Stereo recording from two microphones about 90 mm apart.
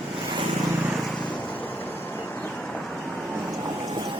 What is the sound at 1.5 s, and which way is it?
Vehicle, 20° left (ahead or behind).